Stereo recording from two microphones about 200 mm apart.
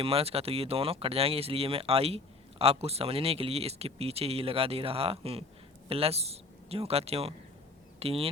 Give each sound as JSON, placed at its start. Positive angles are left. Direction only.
{"t": 0.0, "sound": "speech", "side_deg": -30}